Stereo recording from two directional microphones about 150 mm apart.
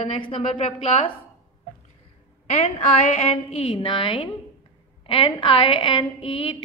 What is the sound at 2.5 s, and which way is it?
A woman's voice, 45° left (ahead or behind).